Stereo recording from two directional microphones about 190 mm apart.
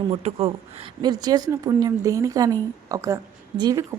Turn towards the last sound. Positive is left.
turn(degrees=-20)  # may be behind; listen again after turning